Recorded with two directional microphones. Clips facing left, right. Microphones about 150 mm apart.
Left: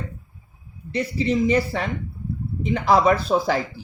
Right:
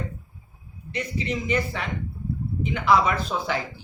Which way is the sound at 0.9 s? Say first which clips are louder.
Left 6 dB; 35° left (ahead or behind).